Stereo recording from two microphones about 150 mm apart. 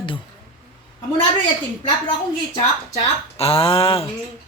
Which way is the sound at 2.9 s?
40° left (ahead or behind).